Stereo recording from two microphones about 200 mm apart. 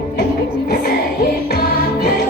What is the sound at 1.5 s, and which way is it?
Music, 50° left (ahead or behind).